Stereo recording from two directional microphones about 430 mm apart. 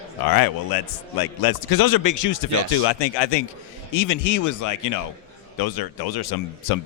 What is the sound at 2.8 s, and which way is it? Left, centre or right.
Speech, left.